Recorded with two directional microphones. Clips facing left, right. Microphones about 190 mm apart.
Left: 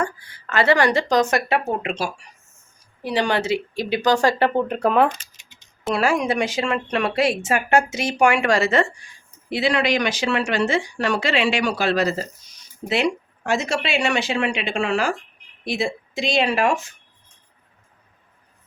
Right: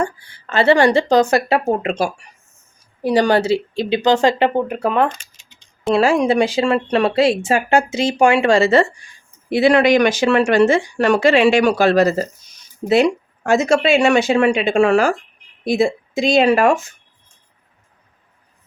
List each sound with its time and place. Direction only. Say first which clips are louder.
0.0 s speech: right 4 dB; 30° right (ahead or behind)
4.8 s speech: left 1 dB; centre (ahead or behind)
5.9 s speech: right 6 dB; 25° right (ahead or behind)
9.5 s speech: right 8 dB; 55° right (ahead or behind)